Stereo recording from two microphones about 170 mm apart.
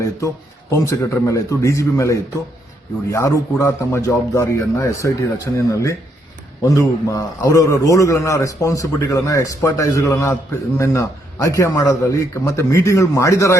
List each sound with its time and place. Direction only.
0.7 s a man's voice: 15° left (ahead or behind)